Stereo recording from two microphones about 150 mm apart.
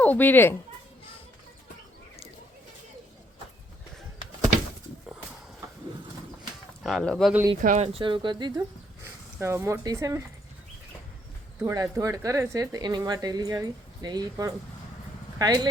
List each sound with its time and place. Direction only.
0.0 s speech: 10° left (ahead or behind)
6.8 s speech: centre (ahead or behind)
7.6 s speech: 60° right (ahead or behind)
7.9 s speech: 35° right (ahead or behind)
9.4 s speech: 20° right (ahead or behind)
11.6 s speech: 20° right (ahead or behind)